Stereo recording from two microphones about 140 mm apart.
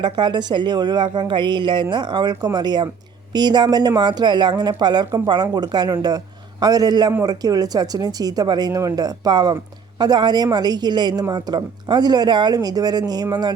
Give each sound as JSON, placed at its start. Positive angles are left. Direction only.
{"t": 0.0, "sound": "a woman's voice", "side_deg": -30}